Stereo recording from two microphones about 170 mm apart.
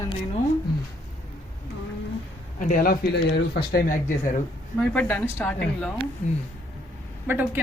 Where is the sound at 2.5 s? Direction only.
50° left (ahead or behind).